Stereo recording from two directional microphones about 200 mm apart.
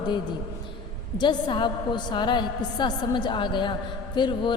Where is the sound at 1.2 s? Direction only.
20° left (ahead or behind).